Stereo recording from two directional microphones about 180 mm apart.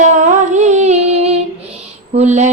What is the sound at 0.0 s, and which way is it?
Female singing, 40° right (ahead or behind).